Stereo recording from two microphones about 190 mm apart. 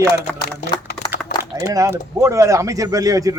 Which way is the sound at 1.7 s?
15° right (ahead or behind).